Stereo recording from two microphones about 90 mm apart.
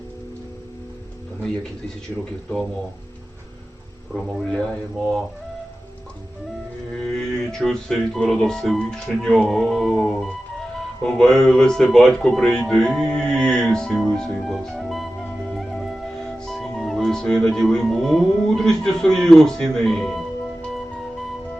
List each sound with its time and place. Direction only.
4.1 s speech: centre (ahead or behind)
7.0 s music: 5° left (ahead or behind)
11.0 s speech: 5° left (ahead or behind)